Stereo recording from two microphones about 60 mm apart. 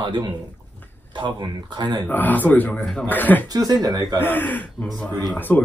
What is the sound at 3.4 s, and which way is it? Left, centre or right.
Speech, right.